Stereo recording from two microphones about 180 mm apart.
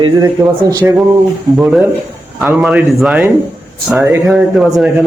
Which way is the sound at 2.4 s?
5° right (ahead or behind).